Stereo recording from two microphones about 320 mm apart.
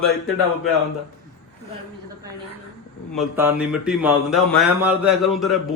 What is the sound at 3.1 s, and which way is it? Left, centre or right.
Speech, centre.